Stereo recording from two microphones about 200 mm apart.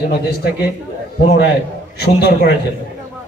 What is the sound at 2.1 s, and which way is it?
Speech, 55° left (ahead or behind).